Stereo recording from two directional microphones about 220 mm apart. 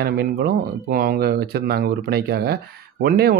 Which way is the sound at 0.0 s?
45° right (ahead or behind).